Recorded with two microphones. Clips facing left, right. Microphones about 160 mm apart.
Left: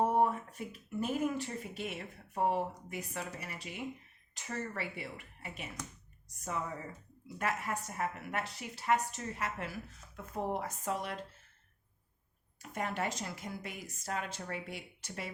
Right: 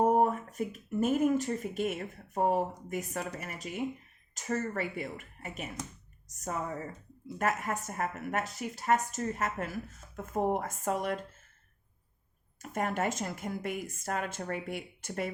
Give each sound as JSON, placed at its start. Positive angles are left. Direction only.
{"t": 0.0, "sound": "speech", "side_deg": -40}
{"t": 12.5, "sound": "speech", "side_deg": -45}